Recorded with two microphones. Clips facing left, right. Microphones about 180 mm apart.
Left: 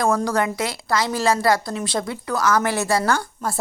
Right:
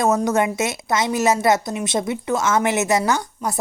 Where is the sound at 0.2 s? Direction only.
20° right (ahead or behind).